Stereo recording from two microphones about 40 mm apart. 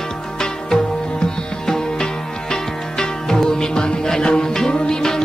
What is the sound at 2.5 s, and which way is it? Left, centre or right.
Music, centre.